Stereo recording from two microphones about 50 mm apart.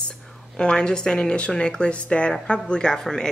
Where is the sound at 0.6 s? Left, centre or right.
Centre.